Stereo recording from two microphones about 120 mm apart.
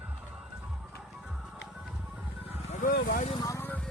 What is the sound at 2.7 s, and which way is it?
Vehicle, 70° left (ahead or behind).